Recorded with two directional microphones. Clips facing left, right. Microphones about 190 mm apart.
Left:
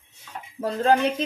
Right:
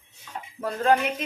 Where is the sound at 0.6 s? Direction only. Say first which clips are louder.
Left 2 dB; 30° left (ahead or behind).